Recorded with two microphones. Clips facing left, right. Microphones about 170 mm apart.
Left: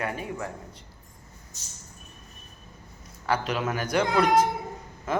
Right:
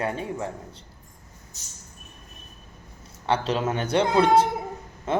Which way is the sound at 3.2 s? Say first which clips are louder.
Right 3 dB; 30° right (ahead or behind).